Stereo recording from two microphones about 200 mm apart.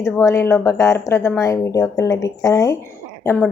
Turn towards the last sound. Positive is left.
turn(degrees=10)  # may be behind; listen again after turning